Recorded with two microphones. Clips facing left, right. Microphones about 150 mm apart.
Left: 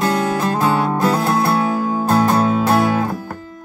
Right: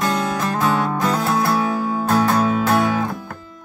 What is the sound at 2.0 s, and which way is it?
Music, 25° left (ahead or behind).